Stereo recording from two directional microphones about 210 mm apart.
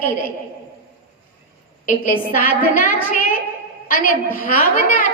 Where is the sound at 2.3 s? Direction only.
40° left (ahead or behind).